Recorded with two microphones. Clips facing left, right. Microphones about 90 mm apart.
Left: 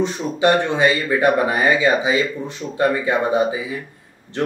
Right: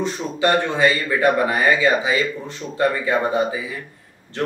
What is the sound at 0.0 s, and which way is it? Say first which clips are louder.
Speech: left 3 dB; 20° left (ahead or behind).